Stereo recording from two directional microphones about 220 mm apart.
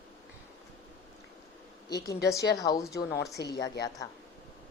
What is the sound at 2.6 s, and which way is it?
Speech, 15° left (ahead or behind).